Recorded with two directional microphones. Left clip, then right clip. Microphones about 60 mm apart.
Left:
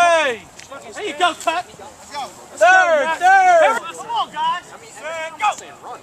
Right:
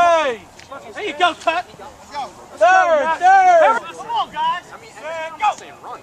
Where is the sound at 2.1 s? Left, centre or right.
Centre.